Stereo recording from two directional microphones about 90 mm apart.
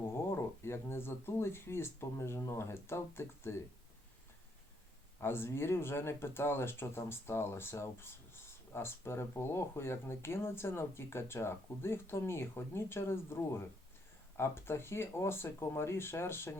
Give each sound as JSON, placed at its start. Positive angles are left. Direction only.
{"t": 0.3, "sound": "speech", "side_deg": 30}
{"t": 5.2, "sound": "speech", "side_deg": 25}